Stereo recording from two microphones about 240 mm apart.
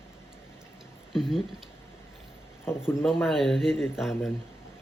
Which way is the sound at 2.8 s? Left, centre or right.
Centre.